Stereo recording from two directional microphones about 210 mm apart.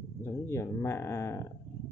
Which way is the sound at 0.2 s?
15° left (ahead or behind).